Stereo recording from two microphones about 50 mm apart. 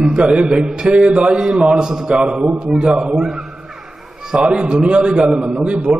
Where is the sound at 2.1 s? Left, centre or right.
Right.